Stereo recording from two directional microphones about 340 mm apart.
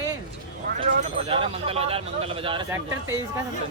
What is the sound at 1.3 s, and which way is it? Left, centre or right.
Speech, centre.